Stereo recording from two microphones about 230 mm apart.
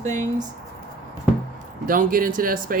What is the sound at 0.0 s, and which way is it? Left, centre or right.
Speech, right.